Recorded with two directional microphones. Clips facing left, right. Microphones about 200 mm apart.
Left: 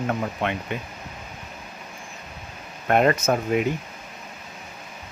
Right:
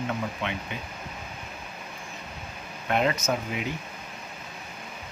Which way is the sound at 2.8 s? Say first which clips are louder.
Left 6 dB; 55° left (ahead or behind).